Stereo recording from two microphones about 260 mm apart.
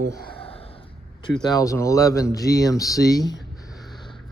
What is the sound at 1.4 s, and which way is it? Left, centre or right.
Speech, centre.